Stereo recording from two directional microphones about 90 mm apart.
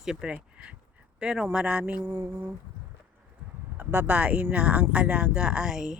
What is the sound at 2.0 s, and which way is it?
Speech, 40° right (ahead or behind).